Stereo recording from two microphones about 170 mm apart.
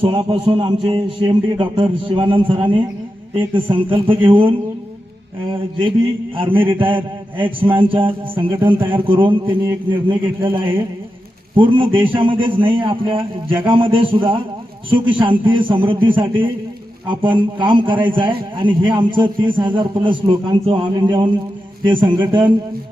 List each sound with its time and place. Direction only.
0.0 s a man's voice: 30° right (ahead or behind)
6.3 s a man's voice: 30° right (ahead or behind)